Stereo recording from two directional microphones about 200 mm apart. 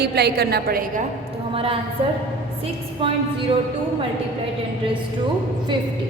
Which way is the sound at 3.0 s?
25° right (ahead or behind).